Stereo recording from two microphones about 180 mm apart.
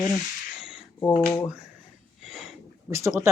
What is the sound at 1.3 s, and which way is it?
Speech, 10° left (ahead or behind).